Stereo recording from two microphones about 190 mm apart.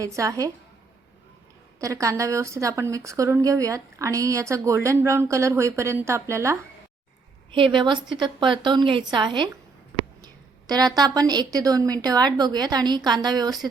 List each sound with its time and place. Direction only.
0.0 s speech: 15° right (ahead or behind)
1.8 s speech: 15° right (ahead or behind)
7.5 s a woman's voice: 25° right (ahead or behind)
10.7 s a woman's voice: 20° right (ahead or behind)